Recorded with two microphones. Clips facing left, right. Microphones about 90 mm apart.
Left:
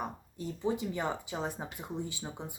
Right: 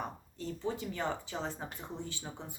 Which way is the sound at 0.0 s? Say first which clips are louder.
Left 2 dB; 15° left (ahead or behind).